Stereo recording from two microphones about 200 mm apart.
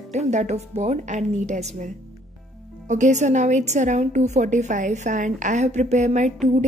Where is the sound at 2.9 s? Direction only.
35° right (ahead or behind).